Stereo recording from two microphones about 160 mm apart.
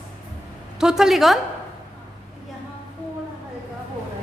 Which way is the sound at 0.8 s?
5° right (ahead or behind).